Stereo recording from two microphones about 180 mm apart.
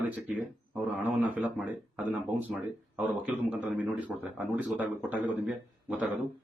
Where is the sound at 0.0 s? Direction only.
10° right (ahead or behind).